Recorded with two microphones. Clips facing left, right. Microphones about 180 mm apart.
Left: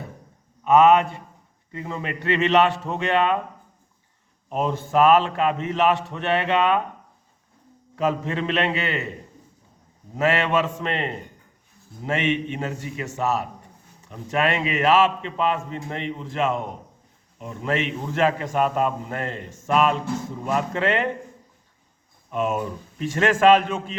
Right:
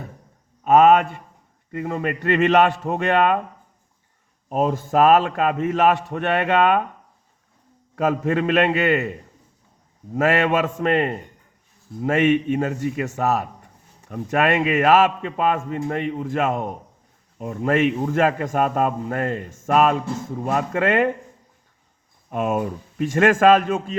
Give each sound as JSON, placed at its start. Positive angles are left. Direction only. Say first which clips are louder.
{"t": 0.6, "sound": "a man's voice", "louder": "right 2 dB", "side_deg": -50}
{"t": 4.4, "sound": "a man's voice", "louder": "right 4 dB", "side_deg": -45}
{"t": 7.9, "sound": "a man's voice", "louder": "right 4 dB", "side_deg": -50}
{"t": 10.2, "sound": "a man's voice", "louder": "right 2 dB", "side_deg": -50}
{"t": 22.3, "sound": "a man's voice", "louder": "right 2 dB", "side_deg": -55}